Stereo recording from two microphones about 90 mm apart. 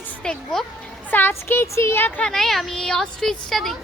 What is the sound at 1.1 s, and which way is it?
Speech, 25° left (ahead or behind).